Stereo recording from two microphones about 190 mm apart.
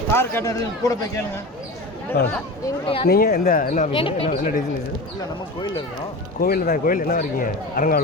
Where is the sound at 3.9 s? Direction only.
30° left (ahead or behind).